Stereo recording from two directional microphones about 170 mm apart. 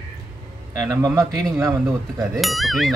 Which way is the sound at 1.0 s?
20° right (ahead or behind).